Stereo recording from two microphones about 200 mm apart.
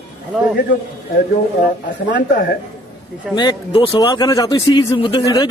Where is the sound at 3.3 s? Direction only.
25° left (ahead or behind).